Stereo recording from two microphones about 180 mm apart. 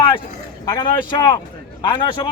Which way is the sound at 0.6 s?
25° left (ahead or behind).